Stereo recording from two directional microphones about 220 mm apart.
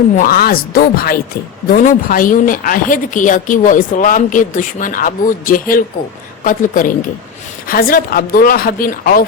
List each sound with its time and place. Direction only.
0.2 s a woman's voice: 40° left (ahead or behind)